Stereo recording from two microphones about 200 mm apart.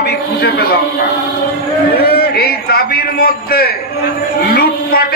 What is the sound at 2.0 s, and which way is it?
A man's voice, 50° left (ahead or behind).